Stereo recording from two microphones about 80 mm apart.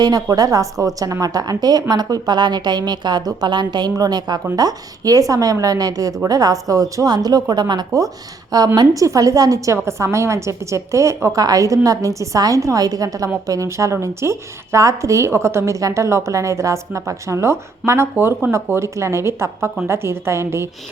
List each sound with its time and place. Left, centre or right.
0.0 s a woman's voice: right
7.9 s a woman's voice: right
9.0 s a woman's voice: right